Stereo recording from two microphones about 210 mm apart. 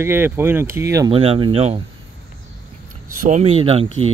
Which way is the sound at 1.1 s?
25° right (ahead or behind).